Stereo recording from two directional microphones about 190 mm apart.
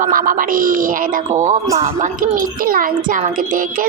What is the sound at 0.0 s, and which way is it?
A woman's voice, 45° right (ahead or behind).